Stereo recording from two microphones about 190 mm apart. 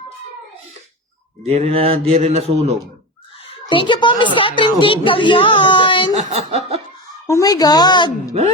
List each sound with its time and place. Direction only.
1.5 s mantra: 30° right (ahead or behind)
3.7 s a woman's voice: 25° left (ahead or behind)
6.1 s mantra: 35° right (ahead or behind)
7.3 s speech: 15° left (ahead or behind)